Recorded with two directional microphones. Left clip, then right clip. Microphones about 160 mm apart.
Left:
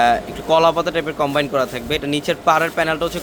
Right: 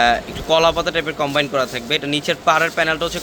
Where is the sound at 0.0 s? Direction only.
15° left (ahead or behind).